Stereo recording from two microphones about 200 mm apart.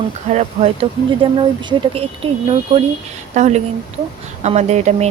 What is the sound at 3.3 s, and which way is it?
Speech, 35° right (ahead or behind).